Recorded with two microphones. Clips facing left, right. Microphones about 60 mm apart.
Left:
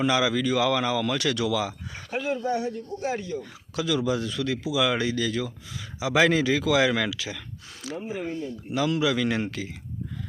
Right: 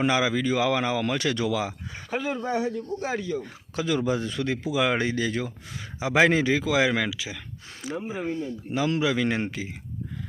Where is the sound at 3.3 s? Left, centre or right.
Right.